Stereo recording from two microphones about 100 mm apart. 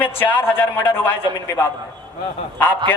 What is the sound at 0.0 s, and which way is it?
A man's voice, 20° left (ahead or behind).